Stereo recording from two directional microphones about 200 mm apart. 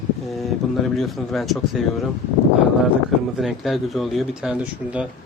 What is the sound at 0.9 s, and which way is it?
Speech, centre (ahead or behind).